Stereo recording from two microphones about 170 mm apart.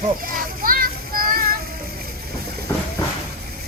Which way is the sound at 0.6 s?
55° right (ahead or behind).